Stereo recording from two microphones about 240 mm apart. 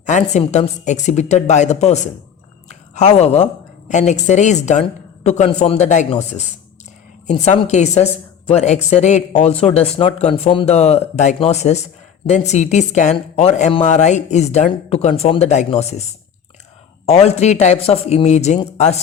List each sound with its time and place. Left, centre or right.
0.0 s a woman's voice: left
17.1 s a woman's voice: left